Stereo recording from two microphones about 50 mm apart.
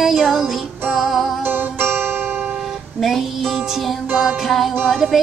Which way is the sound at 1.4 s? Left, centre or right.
Right.